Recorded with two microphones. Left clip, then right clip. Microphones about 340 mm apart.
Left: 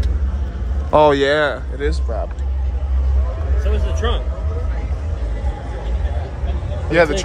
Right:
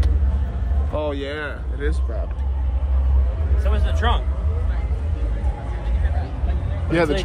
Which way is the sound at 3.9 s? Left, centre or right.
Right.